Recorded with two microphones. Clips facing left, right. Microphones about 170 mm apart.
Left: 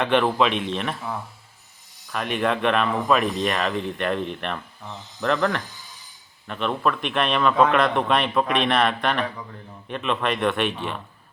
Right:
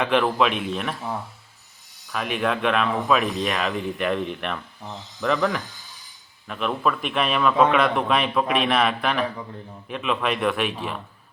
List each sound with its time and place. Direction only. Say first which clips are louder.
0.0 s a man's voice: left 1 dB; centre (ahead or behind)
2.1 s a man's voice: left 1 dB; centre (ahead or behind)